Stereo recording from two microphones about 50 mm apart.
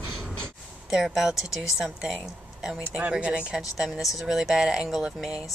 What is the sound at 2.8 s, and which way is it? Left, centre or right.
Speech, right.